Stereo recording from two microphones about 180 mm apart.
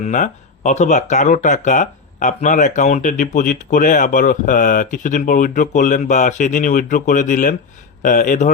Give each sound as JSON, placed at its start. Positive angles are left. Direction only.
{"t": 0.0, "sound": "speech", "side_deg": 45}